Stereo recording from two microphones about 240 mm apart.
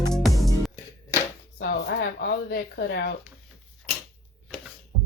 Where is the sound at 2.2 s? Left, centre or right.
Left.